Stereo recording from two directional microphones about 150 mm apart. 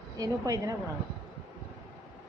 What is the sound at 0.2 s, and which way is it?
Speech, 25° right (ahead or behind).